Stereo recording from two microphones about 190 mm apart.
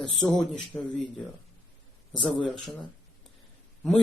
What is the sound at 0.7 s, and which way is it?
Speech, 15° left (ahead or behind).